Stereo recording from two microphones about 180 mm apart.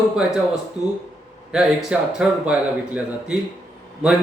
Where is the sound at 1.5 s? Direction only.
5° right (ahead or behind).